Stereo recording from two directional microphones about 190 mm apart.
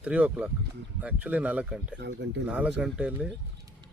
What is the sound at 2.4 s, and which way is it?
Speech, 5° right (ahead or behind).